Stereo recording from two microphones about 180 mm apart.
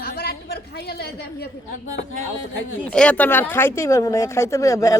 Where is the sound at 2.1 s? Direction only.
90° left.